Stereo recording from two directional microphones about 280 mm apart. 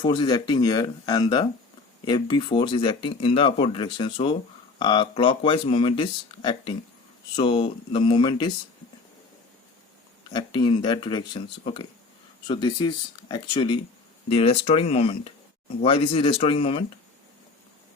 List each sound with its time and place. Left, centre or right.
0.0 s speech: centre
10.3 s speech: centre